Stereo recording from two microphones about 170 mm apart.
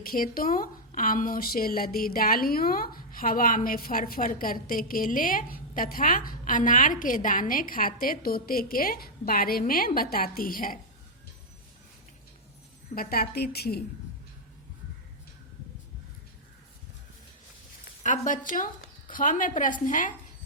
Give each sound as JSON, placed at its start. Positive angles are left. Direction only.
{"t": 0.0, "sound": "a woman's voice", "side_deg": 60}
{"t": 12.9, "sound": "a woman's voice", "side_deg": 60}
{"t": 18.0, "sound": "speech", "side_deg": 50}